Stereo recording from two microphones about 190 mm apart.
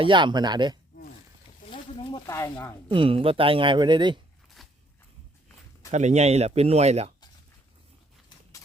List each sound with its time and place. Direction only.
0.0 s speech: 25° right (ahead or behind)
1.7 s a sound: 25° left (ahead or behind)
2.2 s speech: 15° left (ahead or behind)
2.9 s speech: 30° right (ahead or behind)
4.6 s a sound: centre (ahead or behind)
5.9 s speech: 35° right (ahead or behind)